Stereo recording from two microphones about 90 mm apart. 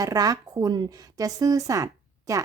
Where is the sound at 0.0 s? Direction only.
40° right (ahead or behind).